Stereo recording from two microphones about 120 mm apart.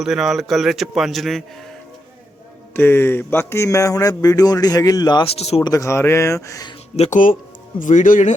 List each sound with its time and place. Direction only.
0.0 s a man's voice: centre (ahead or behind)
2.7 s speech: 20° left (ahead or behind); by 5.2 s 35° left (ahead or behind)
5.2 s speech: 60° left (ahead or behind)
5.6 s speech: 30° left (ahead or behind)
6.9 s speech: 75° left (ahead or behind)
7.8 s speech: 90° left